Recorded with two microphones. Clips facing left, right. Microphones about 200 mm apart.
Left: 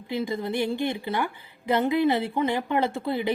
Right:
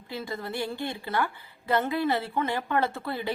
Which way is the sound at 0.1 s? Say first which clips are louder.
Left 6 dB; 15° left (ahead or behind).